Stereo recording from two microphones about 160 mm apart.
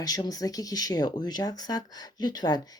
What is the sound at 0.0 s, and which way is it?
Speech, 25° left (ahead or behind).